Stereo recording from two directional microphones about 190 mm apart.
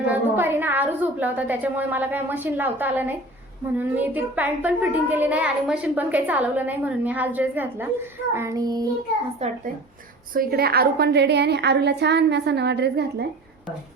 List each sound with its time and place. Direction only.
0.1 s a woman's voice: 10° right (ahead or behind)
8.3 s child singing: 15° right (ahead or behind)
9.4 s speech: 35° right (ahead or behind)
10.3 s a woman's voice: 55° right (ahead or behind)